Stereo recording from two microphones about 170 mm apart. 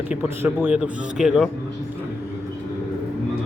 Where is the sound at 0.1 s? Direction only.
10° right (ahead or behind).